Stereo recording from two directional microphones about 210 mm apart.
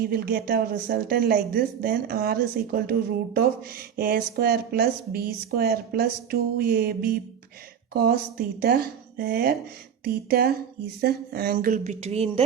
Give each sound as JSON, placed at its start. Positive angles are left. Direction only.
{"t": 0.0, "sound": "a woman's voice", "side_deg": -45}
{"t": 3.9, "sound": "a woman's voice", "side_deg": -45}